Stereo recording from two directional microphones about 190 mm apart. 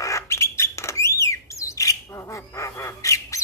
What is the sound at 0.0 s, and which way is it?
Bird, 15° left (ahead or behind).